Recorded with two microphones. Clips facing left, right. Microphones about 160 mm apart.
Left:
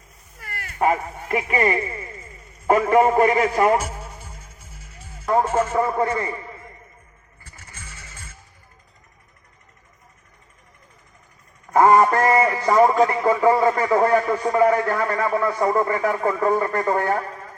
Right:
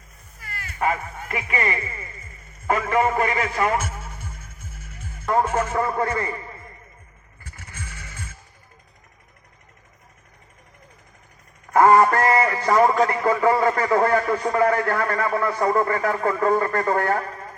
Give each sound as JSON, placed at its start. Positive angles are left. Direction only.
{"t": 0.3, "sound": "music", "side_deg": 60}
{"t": 0.8, "sound": "a man's voice", "side_deg": 30}
{"t": 6.0, "sound": "a man's voice", "side_deg": 20}
{"t": 7.4, "sound": "vehicle", "side_deg": -60}
{"t": 11.7, "sound": "a man's voice", "side_deg": 20}